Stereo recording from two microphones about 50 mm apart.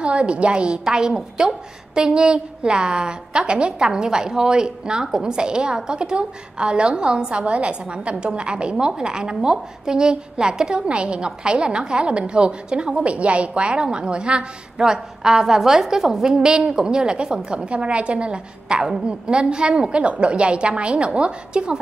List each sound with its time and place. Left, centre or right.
0.0 s a woman's voice: right